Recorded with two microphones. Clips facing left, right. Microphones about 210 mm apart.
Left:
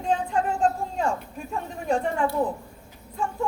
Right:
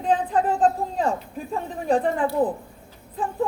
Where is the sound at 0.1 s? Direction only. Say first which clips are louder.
Right 3 dB; 35° right (ahead or behind).